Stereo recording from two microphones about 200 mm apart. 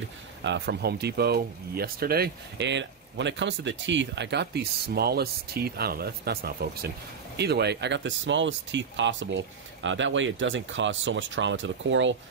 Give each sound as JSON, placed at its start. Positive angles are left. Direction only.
{"t": 0.4, "sound": "speech", "side_deg": -60}